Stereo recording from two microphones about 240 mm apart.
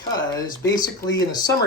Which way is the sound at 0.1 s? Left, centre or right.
Centre.